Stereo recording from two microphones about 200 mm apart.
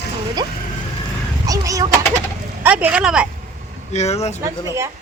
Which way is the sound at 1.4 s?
20° right (ahead or behind).